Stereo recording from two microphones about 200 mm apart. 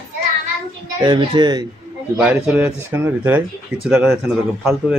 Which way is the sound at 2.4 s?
5° right (ahead or behind).